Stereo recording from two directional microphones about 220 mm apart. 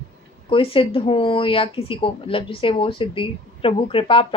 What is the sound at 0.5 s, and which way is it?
Speech, 25° left (ahead or behind).